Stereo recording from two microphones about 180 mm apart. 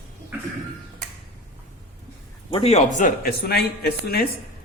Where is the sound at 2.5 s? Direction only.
30° left (ahead or behind).